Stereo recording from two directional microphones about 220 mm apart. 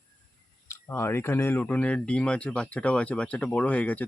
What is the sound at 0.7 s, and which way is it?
Speech, 10° left (ahead or behind).